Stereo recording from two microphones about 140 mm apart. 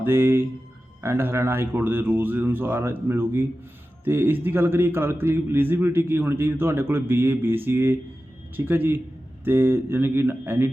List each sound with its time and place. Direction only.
0.0 s a man's voice: 15° right (ahead or behind)